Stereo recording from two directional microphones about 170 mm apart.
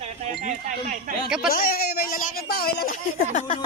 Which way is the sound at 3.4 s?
35° left (ahead or behind).